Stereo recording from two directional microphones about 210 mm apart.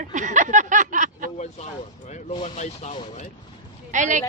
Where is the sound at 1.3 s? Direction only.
35° left (ahead or behind).